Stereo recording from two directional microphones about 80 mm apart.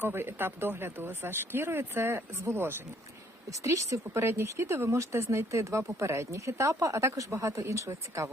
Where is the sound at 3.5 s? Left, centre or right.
Right.